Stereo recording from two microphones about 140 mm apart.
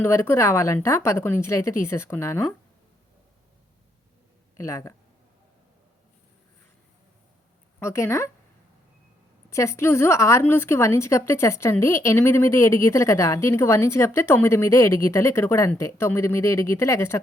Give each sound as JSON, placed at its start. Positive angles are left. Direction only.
{"t": 0.0, "sound": "a woman's voice", "side_deg": 15}
{"t": 4.5, "sound": "speech", "side_deg": 20}
{"t": 7.8, "sound": "a woman's voice", "side_deg": 20}
{"t": 9.5, "sound": "a woman's voice", "side_deg": 20}